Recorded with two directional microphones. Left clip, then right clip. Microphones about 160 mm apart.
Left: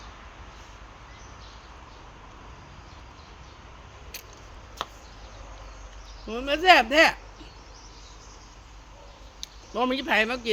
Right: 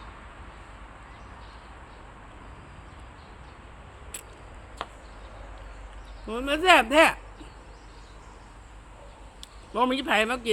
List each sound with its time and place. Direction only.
4.8 s a sound: 40° left (ahead or behind)
6.2 s speech: 20° right (ahead or behind)
9.7 s speech: 15° right (ahead or behind)